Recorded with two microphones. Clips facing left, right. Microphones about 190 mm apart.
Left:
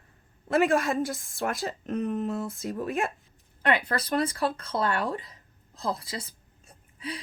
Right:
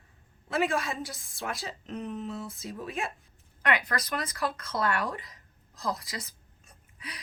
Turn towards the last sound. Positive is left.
turn(degrees=30)  # may be behind; listen again after turning